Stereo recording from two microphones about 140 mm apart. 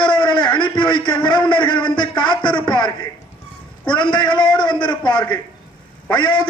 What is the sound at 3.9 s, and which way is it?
A man's voice, 35° left (ahead or behind).